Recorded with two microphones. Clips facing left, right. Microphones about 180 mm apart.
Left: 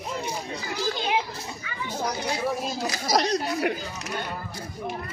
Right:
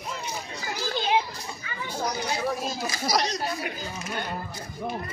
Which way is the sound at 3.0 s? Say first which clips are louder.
Left 3 dB; 65° left (ahead or behind).